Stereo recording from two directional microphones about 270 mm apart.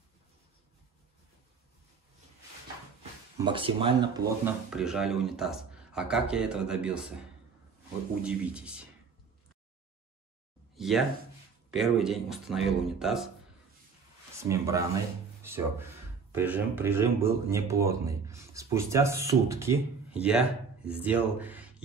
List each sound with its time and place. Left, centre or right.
3.3 s speech: centre
4.5 s speech: centre
10.8 s speech: centre
14.4 s speech: centre